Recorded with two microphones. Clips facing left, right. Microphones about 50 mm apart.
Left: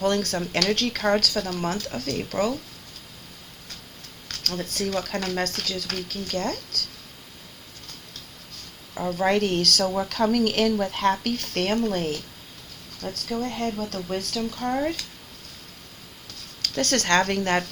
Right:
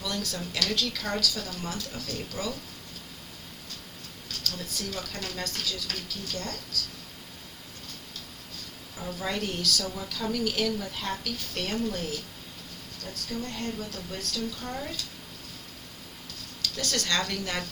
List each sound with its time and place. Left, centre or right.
0.0 s a woman's voice: left
4.3 s a woman's voice: left
9.0 s a woman's voice: left
13.1 s speech: left
13.5 s a woman's voice: left
16.6 s speech: left